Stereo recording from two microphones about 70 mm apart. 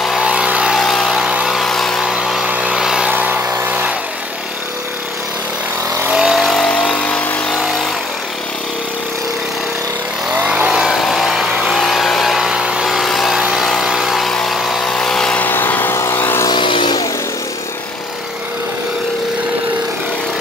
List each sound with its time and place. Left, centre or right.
0.2 s vehicle: centre
0.7 s a sound: centre
2.0 s vehicle: centre
2.4 s vehicle: centre
3.1 s vehicle: right
6.1 s vehicle: centre
6.7 s vehicle: centre
10.3 s vehicle: centre
10.7 s vehicle: centre
12.8 s vehicle: centre
14.3 s a sound: centre
14.9 s vehicle: centre
15.3 s vehicle: left
16.4 s vehicle: left